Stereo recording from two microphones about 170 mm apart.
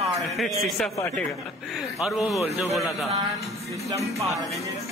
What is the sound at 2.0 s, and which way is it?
Speech, centre (ahead or behind).